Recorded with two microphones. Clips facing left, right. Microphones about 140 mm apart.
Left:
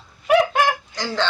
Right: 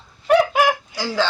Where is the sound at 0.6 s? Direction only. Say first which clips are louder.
Right 2 dB; 10° right (ahead or behind).